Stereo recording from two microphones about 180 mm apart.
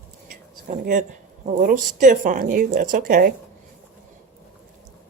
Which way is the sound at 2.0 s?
45° right (ahead or behind).